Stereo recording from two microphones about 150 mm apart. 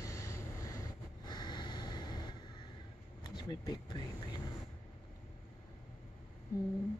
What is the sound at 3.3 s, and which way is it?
Speech, 30° left (ahead or behind).